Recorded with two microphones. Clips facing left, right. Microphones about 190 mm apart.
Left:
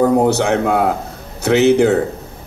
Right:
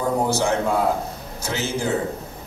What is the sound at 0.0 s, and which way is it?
A man's voice, 65° left (ahead or behind).